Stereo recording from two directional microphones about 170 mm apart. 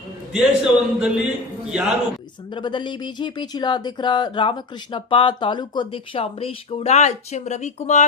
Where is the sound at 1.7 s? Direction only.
5° right (ahead or behind).